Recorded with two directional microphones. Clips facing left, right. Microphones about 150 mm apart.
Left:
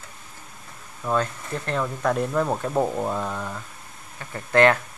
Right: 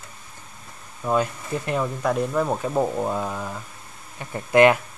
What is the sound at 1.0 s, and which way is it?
Speech, 10° right (ahead or behind).